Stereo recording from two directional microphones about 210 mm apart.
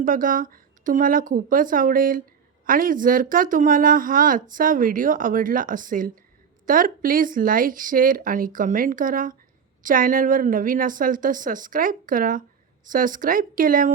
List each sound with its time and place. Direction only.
0.0 s speech: 40° right (ahead or behind)